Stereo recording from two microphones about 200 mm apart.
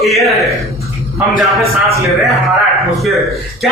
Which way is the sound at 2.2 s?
Centre (ahead or behind).